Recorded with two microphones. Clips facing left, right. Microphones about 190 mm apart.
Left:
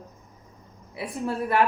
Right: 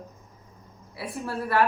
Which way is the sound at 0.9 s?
15° left (ahead or behind).